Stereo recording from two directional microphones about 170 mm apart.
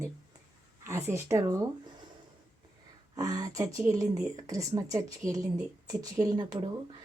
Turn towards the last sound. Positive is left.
turn(degrees=-25)  # may be behind; listen again after turning